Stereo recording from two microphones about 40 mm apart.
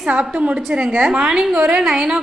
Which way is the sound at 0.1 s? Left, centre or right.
Right.